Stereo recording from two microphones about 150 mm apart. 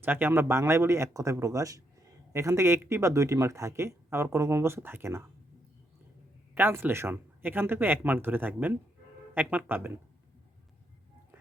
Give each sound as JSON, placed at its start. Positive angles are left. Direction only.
{"t": 0.0, "sound": "speech", "side_deg": -15}
{"t": 6.5, "sound": "speech", "side_deg": -15}